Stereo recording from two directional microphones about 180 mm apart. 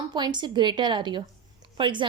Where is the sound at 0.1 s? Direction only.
25° right (ahead or behind).